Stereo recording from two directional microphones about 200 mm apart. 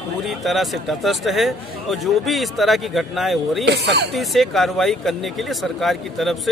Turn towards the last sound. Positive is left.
turn(degrees=0)  # may be behind; listen again after turning